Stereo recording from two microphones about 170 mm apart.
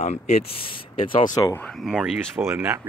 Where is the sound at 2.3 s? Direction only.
15° right (ahead or behind).